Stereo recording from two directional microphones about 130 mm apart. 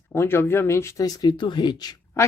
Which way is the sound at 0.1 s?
20° left (ahead or behind).